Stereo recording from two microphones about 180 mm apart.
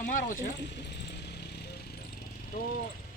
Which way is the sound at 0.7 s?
70° left (ahead or behind).